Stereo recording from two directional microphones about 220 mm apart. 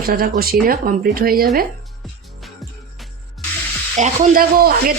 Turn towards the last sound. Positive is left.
turn(degrees=-40)  # may be behind; listen again after turning